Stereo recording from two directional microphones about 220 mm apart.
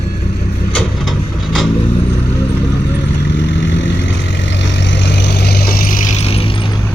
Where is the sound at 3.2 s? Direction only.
50° left (ahead or behind); by 6.7 s 25° left (ahead or behind).